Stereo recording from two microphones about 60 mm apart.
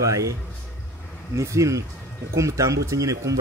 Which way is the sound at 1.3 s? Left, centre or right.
Right.